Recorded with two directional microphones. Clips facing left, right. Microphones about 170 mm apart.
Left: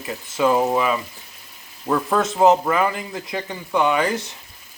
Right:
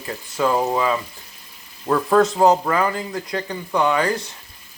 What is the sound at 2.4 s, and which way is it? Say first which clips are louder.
Speech: left 1 dB; 20° left (ahead or behind).